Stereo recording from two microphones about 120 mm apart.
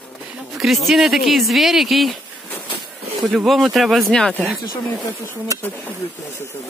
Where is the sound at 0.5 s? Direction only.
Centre (ahead or behind).